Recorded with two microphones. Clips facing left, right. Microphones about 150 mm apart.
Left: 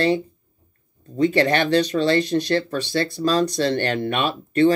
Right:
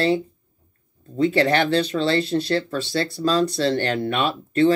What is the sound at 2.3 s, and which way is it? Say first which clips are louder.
Speech: left 1 dB; 15° left (ahead or behind).